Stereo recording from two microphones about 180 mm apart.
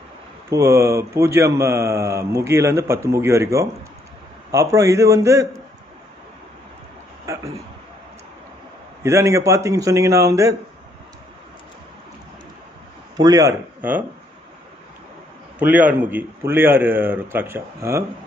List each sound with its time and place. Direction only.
0.5 s speech: 15° right (ahead or behind)
9.0 s speech: 15° right (ahead or behind)
13.2 s speech: 20° right (ahead or behind)
15.6 s speech: 10° right (ahead or behind)